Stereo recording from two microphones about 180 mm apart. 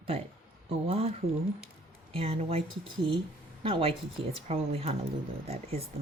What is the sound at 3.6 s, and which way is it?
Speech, 30° right (ahead or behind).